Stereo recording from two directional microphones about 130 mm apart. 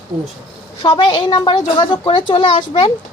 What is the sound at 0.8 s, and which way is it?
A woman's voice, 35° left (ahead or behind).